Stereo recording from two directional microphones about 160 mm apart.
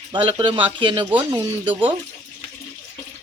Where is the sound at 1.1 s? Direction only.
10° right (ahead or behind).